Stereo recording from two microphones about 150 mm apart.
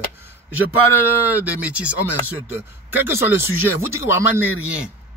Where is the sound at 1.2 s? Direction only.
10° right (ahead or behind).